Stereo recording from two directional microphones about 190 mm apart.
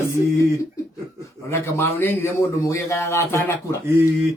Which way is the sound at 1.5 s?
10° left (ahead or behind).